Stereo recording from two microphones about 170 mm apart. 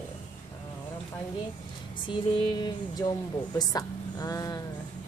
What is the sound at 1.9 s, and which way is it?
Speech, 30° left (ahead or behind).